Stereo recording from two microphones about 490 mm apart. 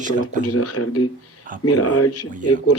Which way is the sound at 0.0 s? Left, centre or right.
Centre.